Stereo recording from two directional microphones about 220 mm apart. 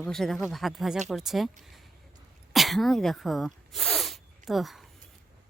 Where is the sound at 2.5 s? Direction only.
Centre (ahead or behind).